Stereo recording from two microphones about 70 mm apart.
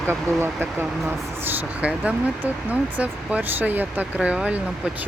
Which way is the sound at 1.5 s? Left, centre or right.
Right.